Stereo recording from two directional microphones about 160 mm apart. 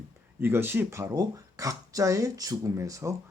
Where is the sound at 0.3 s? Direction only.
15° right (ahead or behind).